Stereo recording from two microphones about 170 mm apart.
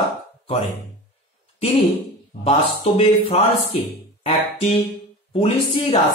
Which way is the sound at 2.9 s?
35° left (ahead or behind).